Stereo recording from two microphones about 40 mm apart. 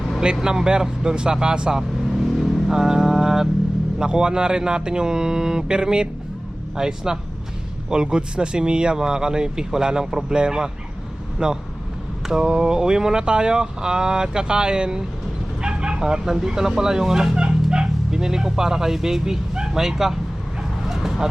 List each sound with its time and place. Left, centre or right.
0.4 s speech: centre
2.1 s vehicle: centre
3.9 s speech: centre
12.2 s speech: centre
20.6 s vehicle: centre